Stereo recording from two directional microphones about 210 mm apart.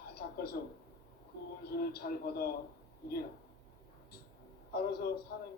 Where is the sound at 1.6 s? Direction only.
50° left (ahead or behind).